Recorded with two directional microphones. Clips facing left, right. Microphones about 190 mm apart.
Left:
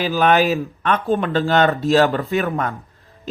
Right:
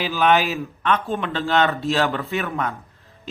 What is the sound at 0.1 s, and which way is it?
A man's voice, 45° left (ahead or behind).